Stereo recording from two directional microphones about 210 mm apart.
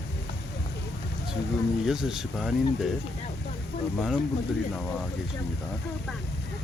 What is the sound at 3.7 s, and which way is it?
Speech, 50° left (ahead or behind).